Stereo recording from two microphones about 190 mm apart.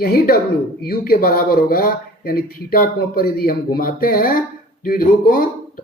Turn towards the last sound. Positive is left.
turn(degrees=45)  # may be behind; listen again after turning